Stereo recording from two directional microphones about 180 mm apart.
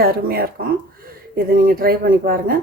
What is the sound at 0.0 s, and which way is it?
Speech, 55° right (ahead or behind).